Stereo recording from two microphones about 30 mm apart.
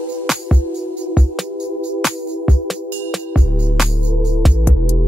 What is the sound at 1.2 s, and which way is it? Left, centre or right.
Music, right.